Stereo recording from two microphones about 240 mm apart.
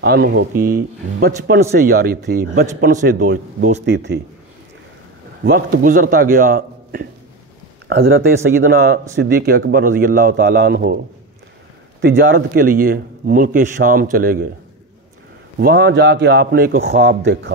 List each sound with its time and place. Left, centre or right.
0.0 s speech: right
5.4 s speech: right
12.0 s speech: right
15.6 s a man's voice: right